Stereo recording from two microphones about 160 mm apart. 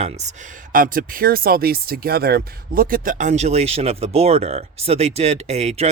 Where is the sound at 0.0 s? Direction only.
45° right (ahead or behind).